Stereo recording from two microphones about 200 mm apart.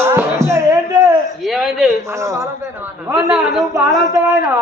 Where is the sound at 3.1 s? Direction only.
Centre (ahead or behind).